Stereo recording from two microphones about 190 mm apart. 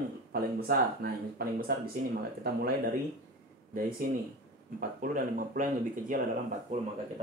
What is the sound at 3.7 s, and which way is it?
Speech, 45° right (ahead or behind).